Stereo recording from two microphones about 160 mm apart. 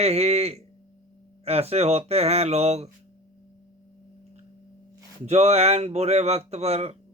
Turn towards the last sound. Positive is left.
turn(degrees=-40)  # may be behind; listen again after turning